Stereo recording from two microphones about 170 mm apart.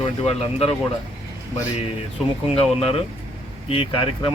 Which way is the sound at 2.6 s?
35° left (ahead or behind).